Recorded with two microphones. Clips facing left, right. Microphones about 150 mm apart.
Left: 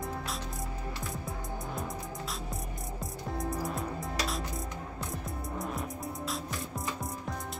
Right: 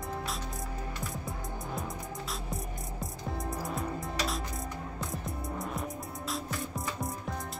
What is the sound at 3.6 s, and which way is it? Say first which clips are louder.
Music: even; centre (ahead or behind).